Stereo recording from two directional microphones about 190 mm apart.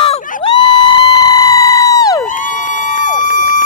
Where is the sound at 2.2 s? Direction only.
45° left (ahead or behind).